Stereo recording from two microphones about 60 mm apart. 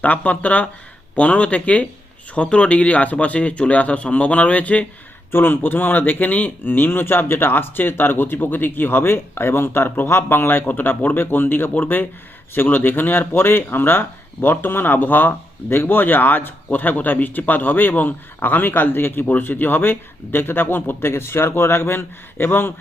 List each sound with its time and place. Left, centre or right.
0.0 s speech: left
5.3 s speech: left